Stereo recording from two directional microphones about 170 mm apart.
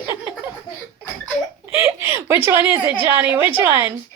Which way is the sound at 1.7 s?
15° right (ahead or behind).